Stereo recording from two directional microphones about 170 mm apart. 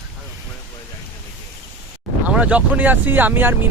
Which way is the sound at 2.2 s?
10° right (ahead or behind).